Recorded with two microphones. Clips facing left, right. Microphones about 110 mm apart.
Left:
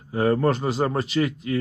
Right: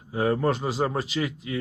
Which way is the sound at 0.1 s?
5° right (ahead or behind).